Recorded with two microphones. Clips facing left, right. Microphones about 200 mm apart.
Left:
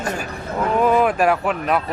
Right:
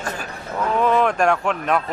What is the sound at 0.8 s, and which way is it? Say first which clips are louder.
Speech: left 1 dB; 10° left (ahead or behind).